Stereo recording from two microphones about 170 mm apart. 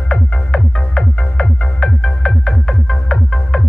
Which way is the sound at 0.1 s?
5° left (ahead or behind).